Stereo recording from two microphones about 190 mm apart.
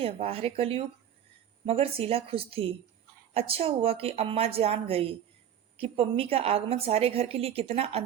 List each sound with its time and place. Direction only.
0.0 s a woman's voice: 30° right (ahead or behind)